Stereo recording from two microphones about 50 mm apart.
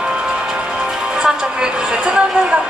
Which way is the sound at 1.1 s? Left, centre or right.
Centre.